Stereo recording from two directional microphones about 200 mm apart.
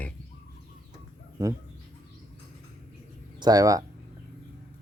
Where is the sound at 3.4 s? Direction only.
20° right (ahead or behind).